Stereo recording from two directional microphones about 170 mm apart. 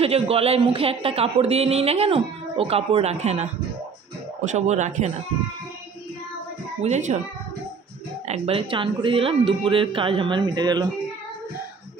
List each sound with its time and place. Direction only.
0.0 s speech: 35° right (ahead or behind)
4.5 s speech: 45° right (ahead or behind)
6.8 s speech: 45° right (ahead or behind)
8.3 s speech: 35° right (ahead or behind)